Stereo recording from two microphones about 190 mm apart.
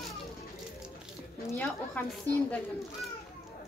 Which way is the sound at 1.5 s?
10° left (ahead or behind).